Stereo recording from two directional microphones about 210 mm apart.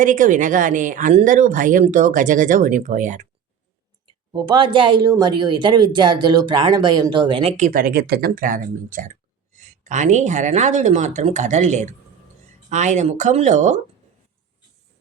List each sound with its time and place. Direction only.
0.0 s speech: 35° right (ahead or behind)
4.3 s speech: 20° right (ahead or behind)